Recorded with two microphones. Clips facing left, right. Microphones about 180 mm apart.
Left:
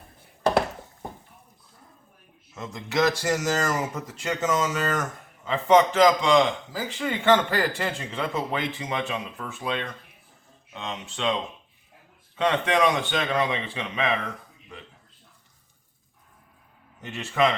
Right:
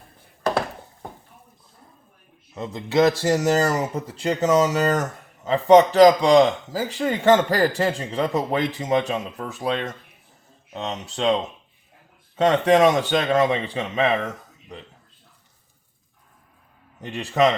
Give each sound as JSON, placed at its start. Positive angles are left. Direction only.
{"t": 2.6, "sound": "a man's voice", "side_deg": -30}
{"t": 12.4, "sound": "a man's voice", "side_deg": -40}
{"t": 17.0, "sound": "a man's voice", "side_deg": -35}